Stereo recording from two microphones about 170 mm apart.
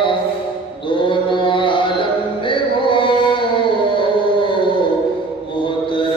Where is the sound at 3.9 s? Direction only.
30° left (ahead or behind).